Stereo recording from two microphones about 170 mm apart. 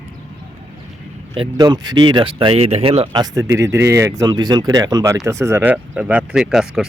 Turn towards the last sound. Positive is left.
turn(degrees=-5)  # may be behind; listen again after turning